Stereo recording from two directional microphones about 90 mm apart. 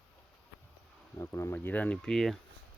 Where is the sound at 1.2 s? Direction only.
30° left (ahead or behind).